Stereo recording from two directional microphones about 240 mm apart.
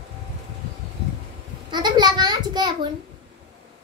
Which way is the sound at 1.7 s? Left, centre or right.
Centre.